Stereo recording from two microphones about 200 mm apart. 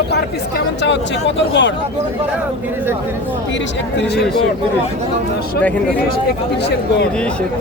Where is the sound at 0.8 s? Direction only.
60° left (ahead or behind).